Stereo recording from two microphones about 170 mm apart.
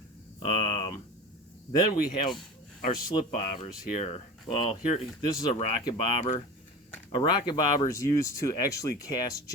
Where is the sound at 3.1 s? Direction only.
30° left (ahead or behind).